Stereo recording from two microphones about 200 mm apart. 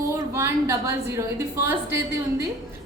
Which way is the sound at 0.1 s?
15° right (ahead or behind).